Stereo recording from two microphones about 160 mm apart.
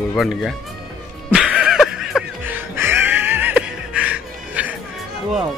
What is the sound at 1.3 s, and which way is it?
Snicker, 5° right (ahead or behind).